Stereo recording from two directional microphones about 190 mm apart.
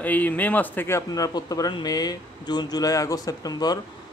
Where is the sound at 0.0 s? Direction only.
10° left (ahead or behind).